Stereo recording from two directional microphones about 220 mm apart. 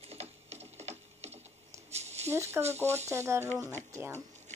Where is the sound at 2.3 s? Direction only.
10° right (ahead or behind).